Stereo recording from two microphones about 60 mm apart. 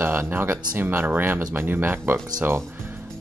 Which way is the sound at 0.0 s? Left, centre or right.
Right.